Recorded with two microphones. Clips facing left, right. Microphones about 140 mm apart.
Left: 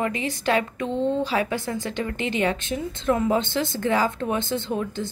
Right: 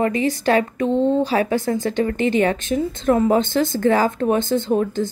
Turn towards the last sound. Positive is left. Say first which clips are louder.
# right 8 dB
turn(degrees=-40)  # may be behind; listen again after turning